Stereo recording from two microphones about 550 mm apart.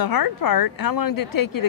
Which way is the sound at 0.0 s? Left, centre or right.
Left.